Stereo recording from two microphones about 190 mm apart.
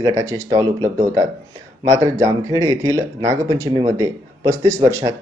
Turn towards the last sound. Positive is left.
turn(degrees=-15)  # may be behind; listen again after turning